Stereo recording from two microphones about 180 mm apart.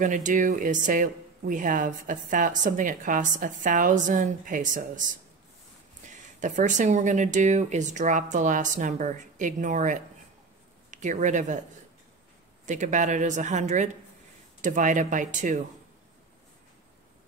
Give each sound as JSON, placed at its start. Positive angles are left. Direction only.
{"t": 0.0, "sound": "speech", "side_deg": -45}
{"t": 6.0, "sound": "speech", "side_deg": -45}
{"t": 12.6, "sound": "speech", "side_deg": -45}